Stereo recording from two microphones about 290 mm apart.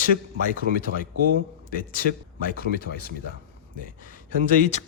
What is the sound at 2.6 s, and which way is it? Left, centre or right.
Speech, left.